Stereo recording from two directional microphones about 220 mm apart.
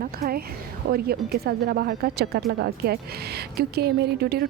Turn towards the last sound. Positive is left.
turn(degrees=-45)  # may be behind; listen again after turning